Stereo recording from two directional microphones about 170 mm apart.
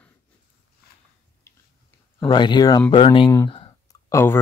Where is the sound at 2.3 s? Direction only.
25° left (ahead or behind).